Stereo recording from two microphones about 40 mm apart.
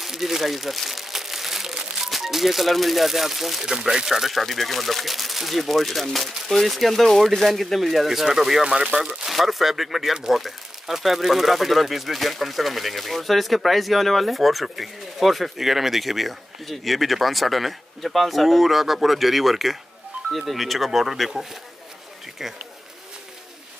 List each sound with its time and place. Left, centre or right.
0.0 s speech: centre
8.7 s speech: right
9.2 s speech: centre